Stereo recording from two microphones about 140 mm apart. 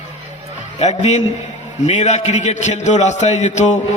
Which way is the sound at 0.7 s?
55° left (ahead or behind).